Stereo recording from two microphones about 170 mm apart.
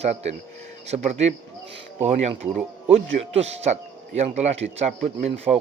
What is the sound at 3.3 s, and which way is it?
A man's voice, 40° right (ahead or behind).